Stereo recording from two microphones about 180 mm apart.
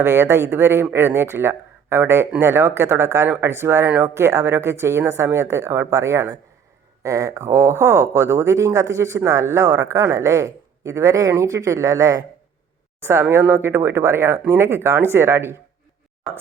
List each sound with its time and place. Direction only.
0.0 s speech: 15° right (ahead or behind)